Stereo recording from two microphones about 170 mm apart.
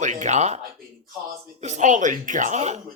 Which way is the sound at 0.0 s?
45° right (ahead or behind).